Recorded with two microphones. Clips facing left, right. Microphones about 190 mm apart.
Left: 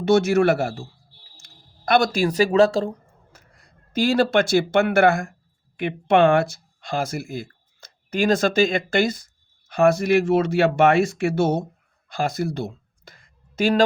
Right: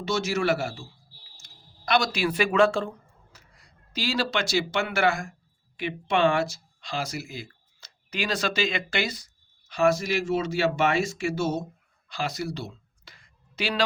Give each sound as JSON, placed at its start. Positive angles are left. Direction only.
{"t": 0.0, "sound": "speech", "side_deg": 55}
{"t": 3.3, "sound": "speech", "side_deg": 50}
{"t": 12.0, "sound": "a sound", "side_deg": 50}